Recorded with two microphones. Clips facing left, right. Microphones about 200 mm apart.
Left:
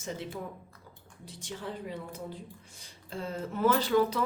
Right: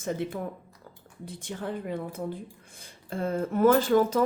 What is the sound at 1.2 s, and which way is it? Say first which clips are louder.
A woman's voice: right 5 dB; 55° right (ahead or behind).